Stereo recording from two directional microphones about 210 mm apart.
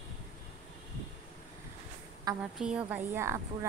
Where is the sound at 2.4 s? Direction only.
5° right (ahead or behind).